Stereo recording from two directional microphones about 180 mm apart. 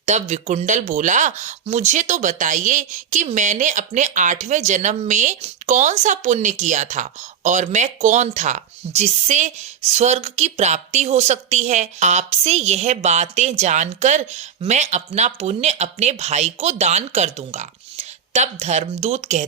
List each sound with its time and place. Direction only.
0.0 s speech: 40° right (ahead or behind)